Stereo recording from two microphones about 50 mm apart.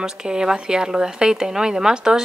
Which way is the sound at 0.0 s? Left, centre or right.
Centre.